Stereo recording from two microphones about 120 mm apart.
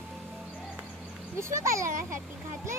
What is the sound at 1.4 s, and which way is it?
Speech, 25° right (ahead or behind).